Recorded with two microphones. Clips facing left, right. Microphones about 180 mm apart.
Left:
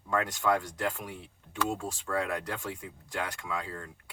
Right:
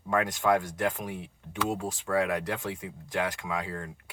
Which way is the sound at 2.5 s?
20° right (ahead or behind).